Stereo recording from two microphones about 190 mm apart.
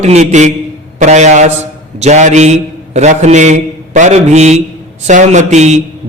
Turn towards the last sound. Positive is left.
turn(degrees=-35)  # may be behind; listen again after turning